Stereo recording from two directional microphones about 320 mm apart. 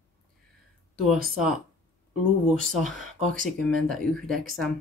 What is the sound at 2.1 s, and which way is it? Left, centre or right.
Speech, centre.